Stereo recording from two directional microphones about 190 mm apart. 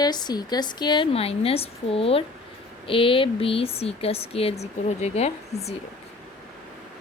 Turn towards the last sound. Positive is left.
turn(degrees=35)  # may be behind; listen again after turning